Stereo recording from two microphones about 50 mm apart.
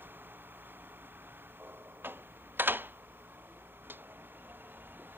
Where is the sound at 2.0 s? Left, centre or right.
Right.